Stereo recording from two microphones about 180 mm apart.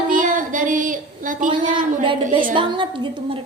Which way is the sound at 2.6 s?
25° right (ahead or behind).